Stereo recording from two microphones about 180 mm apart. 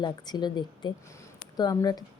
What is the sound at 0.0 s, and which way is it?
Speech, 25° left (ahead or behind).